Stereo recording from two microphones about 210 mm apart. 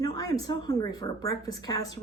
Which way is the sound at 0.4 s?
20° left (ahead or behind).